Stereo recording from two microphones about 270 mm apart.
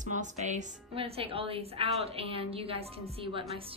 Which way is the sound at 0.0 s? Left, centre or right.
Right.